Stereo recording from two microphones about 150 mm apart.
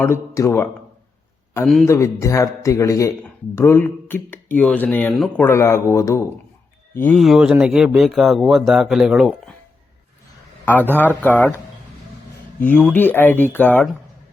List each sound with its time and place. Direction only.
0.0 s speech: 20° left (ahead or behind)
1.8 s speech: 20° left (ahead or behind)
7.2 s speech: centre (ahead or behind)
10.9 s speech: 10° left (ahead or behind)
12.5 s speech: 10° left (ahead or behind)